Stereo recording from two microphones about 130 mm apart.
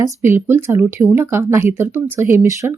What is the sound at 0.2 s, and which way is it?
Speech, 20° right (ahead or behind).